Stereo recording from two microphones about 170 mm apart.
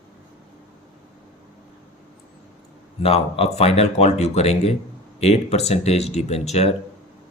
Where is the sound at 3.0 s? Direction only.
35° left (ahead or behind).